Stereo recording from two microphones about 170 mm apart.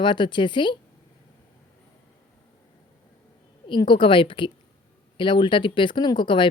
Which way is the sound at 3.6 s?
25° left (ahead or behind).